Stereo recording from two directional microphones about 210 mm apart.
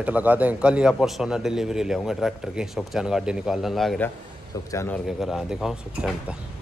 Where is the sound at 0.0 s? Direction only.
5° right (ahead or behind).